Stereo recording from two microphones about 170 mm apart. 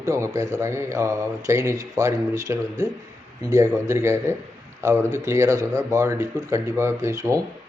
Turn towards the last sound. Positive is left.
turn(degrees=-20)  # may be behind; listen again after turning